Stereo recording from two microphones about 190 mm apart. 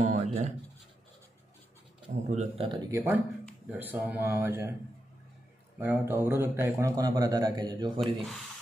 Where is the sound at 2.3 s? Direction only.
35° right (ahead or behind).